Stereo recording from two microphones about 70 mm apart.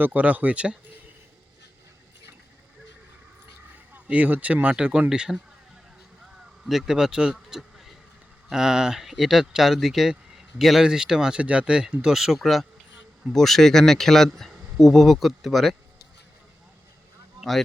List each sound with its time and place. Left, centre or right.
0.0 s speech: right
3.9 s speech: right
6.3 s a sound: centre
8.4 s speech: centre